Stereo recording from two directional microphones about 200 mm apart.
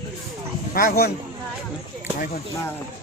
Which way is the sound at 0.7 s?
45° left (ahead or behind).